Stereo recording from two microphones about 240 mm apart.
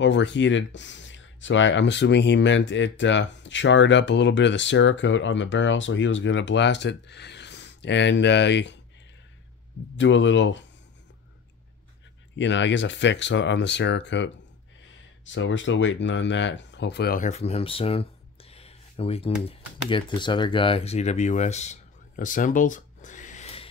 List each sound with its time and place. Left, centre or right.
0.0 s speech: left
9.9 s speech: left
12.4 s speech: left